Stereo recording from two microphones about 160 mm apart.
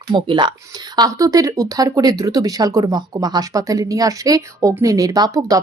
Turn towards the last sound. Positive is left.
turn(degrees=-20)  # may be behind; listen again after turning